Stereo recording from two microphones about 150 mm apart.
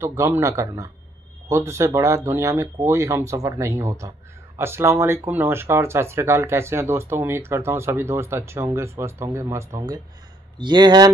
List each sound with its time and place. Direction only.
0.0 s speech: 20° right (ahead or behind)